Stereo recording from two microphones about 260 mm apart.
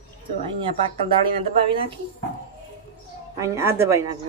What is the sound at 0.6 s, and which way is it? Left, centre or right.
Speech, centre.